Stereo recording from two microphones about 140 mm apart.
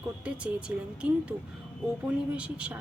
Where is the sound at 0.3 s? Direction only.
10° right (ahead or behind).